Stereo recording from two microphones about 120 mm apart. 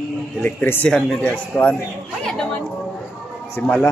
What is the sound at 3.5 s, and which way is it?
Speech, 15° left (ahead or behind).